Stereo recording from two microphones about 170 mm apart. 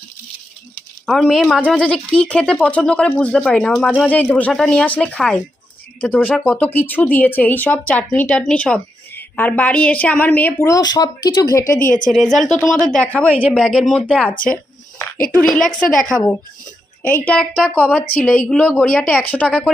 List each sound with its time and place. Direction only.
1.0 s speech: centre (ahead or behind); by 11.6 s 20° left (ahead or behind)
11.6 s a woman's voice: 50° left (ahead or behind)
12.1 s a woman's voice: centre (ahead or behind)
17.2 s a woman's voice: 5° left (ahead or behind)